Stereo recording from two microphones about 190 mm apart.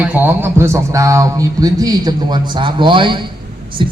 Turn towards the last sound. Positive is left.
turn(degrees=-25)  # may be behind; listen again after turning